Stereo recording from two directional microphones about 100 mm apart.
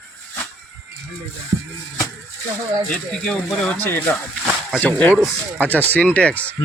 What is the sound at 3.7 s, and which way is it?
Speech, 20° left (ahead or behind).